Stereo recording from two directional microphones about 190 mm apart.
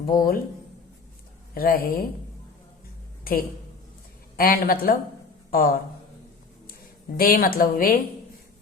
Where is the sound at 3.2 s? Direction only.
50° left (ahead or behind).